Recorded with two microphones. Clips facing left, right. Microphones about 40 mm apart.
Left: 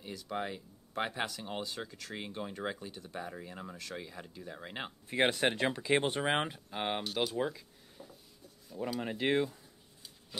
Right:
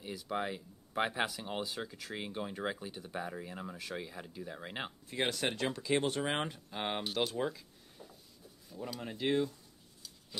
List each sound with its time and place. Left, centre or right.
0.0 s speech: centre
5.0 s speech: left; by 7.0 s centre
7.2 s a sound: centre
8.7 s speech: centre